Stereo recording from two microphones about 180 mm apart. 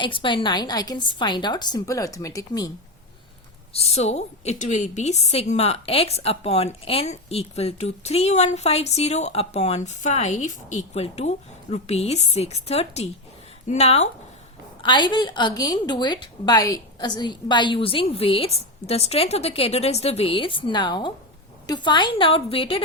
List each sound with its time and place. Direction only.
0.0 s a woman's voice: 25° left (ahead or behind)
3.7 s a woman's voice: 35° left (ahead or behind)
14.8 s a woman's voice: 25° left (ahead or behind)